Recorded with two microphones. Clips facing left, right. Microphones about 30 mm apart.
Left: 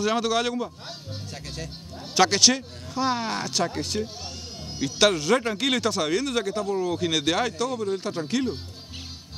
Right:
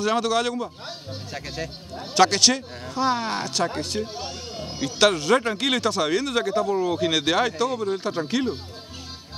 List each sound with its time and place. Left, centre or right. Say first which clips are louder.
0.0 s speech: right 1 dB; centre
0.8 s speech: right 3 dB; centre
2.1 s speech: right 1 dB; centre
4.0 s speech: right 2 dB; centre